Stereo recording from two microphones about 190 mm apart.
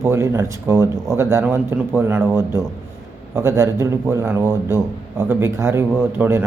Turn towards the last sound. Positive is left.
turn(degrees=-10)  # may be behind; listen again after turning